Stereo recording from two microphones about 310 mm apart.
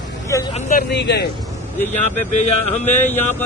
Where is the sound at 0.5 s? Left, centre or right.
Left.